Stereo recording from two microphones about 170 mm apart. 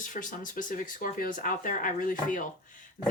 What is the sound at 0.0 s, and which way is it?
Speech, 50° left (ahead or behind).